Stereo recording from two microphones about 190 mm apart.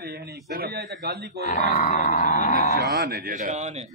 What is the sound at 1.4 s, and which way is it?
Grunt, 45° left (ahead or behind).